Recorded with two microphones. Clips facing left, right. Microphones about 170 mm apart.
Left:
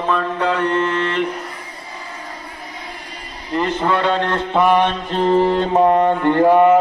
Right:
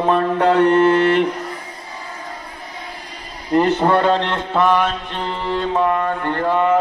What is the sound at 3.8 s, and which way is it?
Speech, 40° right (ahead or behind).